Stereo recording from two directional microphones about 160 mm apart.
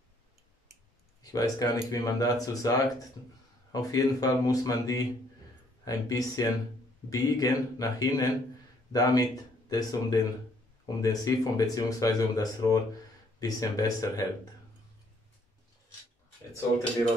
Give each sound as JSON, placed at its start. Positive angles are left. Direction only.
{"t": 1.2, "sound": "speech", "side_deg": 25}